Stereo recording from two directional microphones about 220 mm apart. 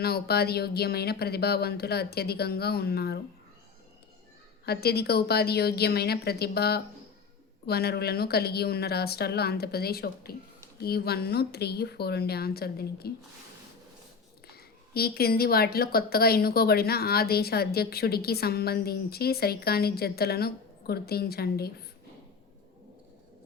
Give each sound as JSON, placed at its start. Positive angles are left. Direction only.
{"t": 0.0, "sound": "a woman's voice", "side_deg": 45}
{"t": 4.6, "sound": "a woman's voice", "side_deg": 45}
{"t": 14.5, "sound": "a woman's voice", "side_deg": 45}